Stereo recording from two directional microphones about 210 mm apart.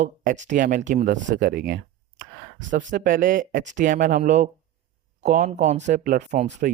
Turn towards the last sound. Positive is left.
turn(degrees=-35)  # may be behind; listen again after turning